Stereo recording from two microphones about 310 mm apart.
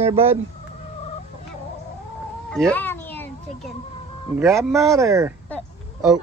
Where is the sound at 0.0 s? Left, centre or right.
Centre.